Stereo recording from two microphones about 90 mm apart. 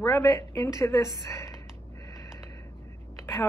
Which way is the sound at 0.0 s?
45° left (ahead or behind).